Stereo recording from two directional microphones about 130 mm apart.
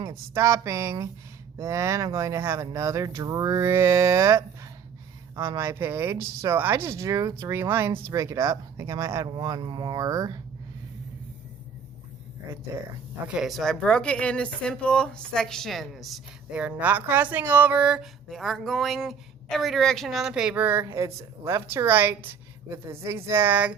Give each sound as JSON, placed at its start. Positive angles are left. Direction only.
{"t": 0.0, "sound": "speech", "side_deg": -25}
{"t": 13.2, "sound": "speech", "side_deg": -5}
{"t": 17.3, "sound": "a sound", "side_deg": -15}